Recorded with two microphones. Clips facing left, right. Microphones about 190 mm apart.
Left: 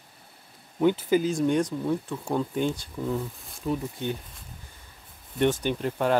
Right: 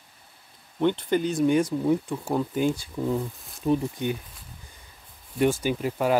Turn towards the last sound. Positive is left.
turn(degrees=-5)  # may be behind; listen again after turning